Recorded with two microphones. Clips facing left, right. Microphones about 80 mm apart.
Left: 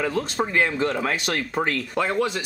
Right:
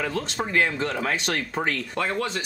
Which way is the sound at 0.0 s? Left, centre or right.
Centre.